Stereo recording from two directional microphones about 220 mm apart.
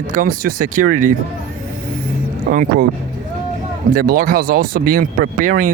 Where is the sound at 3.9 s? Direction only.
40° right (ahead or behind).